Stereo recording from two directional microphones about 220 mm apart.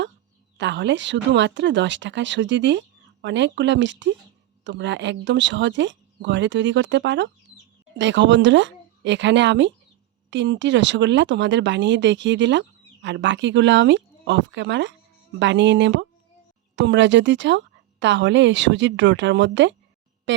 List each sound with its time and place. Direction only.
0.5 s speech: 55° right (ahead or behind)